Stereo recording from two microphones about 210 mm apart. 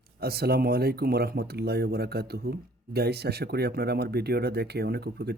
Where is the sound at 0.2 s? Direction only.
50° right (ahead or behind).